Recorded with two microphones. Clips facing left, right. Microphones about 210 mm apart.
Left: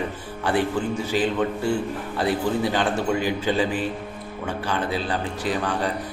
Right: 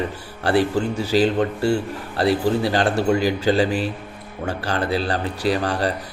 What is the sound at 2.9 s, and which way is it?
Speech, 75° right (ahead or behind).